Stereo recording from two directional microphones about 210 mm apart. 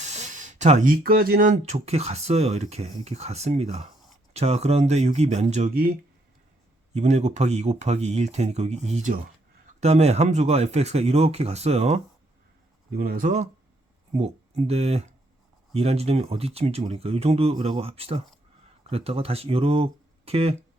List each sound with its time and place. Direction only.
0.0 s speech: 35° right (ahead or behind)
6.9 s speech: 35° right (ahead or behind)
13.0 s speech: 45° right (ahead or behind)